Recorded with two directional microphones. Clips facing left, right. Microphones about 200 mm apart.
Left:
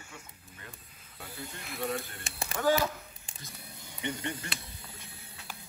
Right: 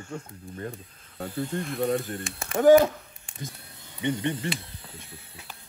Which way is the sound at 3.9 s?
20° right (ahead or behind).